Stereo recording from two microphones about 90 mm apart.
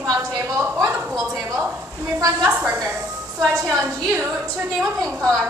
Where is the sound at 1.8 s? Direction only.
10° right (ahead or behind).